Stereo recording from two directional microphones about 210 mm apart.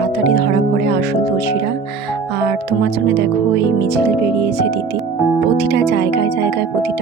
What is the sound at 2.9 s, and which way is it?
Speech, 50° right (ahead or behind).